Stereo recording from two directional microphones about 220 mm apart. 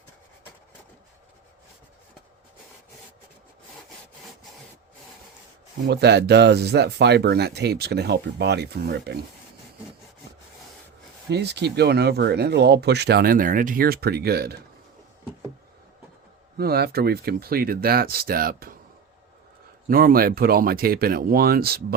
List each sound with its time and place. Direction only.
5.9 s speech: 50° right (ahead or behind)
11.3 s speech: 50° right (ahead or behind)
16.6 s speech: 45° right (ahead or behind)
19.9 s speech: 40° right (ahead or behind)